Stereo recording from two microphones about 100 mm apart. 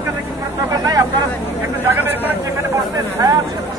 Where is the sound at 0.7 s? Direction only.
40° right (ahead or behind).